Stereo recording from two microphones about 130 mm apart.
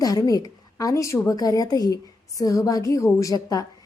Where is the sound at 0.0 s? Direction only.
30° left (ahead or behind).